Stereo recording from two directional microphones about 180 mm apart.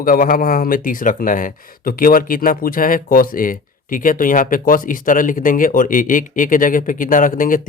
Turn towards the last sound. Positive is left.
turn(degrees=50)  # may be behind; listen again after turning